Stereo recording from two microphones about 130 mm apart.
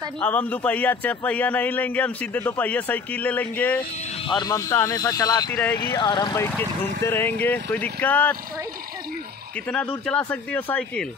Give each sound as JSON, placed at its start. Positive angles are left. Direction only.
{"t": 0.2, "sound": "speech", "side_deg": 10}
{"t": 4.3, "sound": "speech", "side_deg": 30}
{"t": 5.5, "sound": "speech", "side_deg": 15}
{"t": 5.8, "sound": "speech", "side_deg": 35}
{"t": 7.0, "sound": "speech", "side_deg": 20}
{"t": 10.0, "sound": "speech", "side_deg": 10}